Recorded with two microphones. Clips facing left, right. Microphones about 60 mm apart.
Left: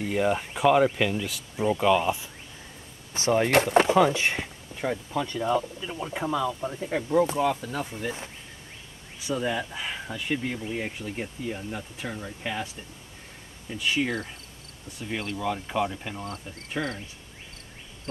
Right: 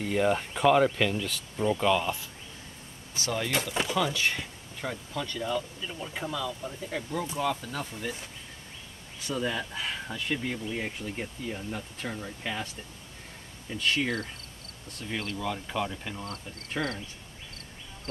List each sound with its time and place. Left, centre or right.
0.0 s speech: centre
3.2 s speech: left; by 8.2 s centre
9.2 s speech: centre
13.7 s speech: centre
16.8 s cricket: centre